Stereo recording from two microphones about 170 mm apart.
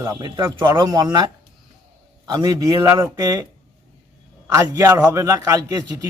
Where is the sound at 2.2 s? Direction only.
20° right (ahead or behind).